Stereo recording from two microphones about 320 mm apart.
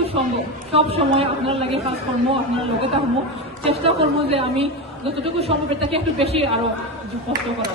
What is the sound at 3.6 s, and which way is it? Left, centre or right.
A woman's voice, centre.